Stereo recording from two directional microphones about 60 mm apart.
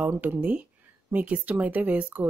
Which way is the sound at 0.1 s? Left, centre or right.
Right.